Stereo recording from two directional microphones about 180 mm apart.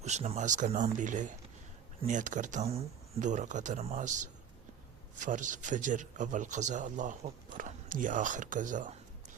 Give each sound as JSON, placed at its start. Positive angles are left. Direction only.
{"t": 0.0, "sound": "a man's voice", "side_deg": -40}